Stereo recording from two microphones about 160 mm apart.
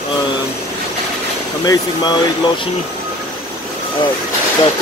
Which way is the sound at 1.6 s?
25° left (ahead or behind).